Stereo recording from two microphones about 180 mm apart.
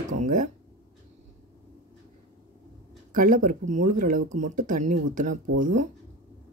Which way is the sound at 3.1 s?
45° right (ahead or behind).